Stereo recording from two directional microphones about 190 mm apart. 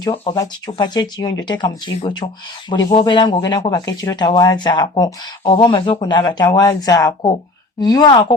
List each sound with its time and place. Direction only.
0.0 s speech: 30° left (ahead or behind)